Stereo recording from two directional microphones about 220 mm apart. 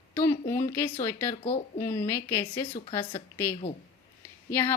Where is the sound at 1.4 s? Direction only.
30° left (ahead or behind).